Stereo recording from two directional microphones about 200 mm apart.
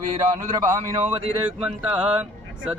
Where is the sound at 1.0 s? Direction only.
30° right (ahead or behind).